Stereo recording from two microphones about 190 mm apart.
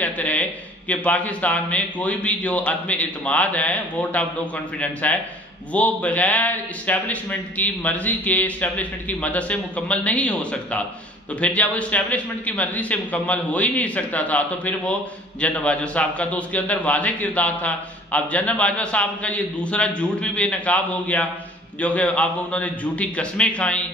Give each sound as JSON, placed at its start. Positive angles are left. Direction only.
{"t": 0.0, "sound": "a man's voice", "side_deg": 10}